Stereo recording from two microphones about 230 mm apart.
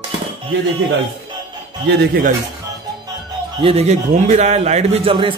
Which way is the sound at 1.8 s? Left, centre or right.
Right.